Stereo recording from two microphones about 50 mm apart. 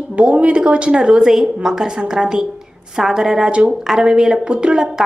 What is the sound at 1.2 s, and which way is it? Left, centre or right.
Speech, centre.